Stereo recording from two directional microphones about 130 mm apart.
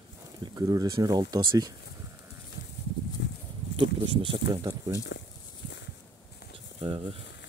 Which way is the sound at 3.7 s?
40° right (ahead or behind).